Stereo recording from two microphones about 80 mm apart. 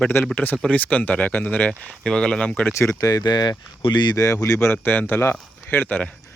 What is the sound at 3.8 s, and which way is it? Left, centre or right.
Speech, left.